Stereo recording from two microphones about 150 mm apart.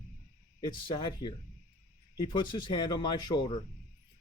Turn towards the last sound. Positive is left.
turn(degrees=30)  # may be behind; listen again after turning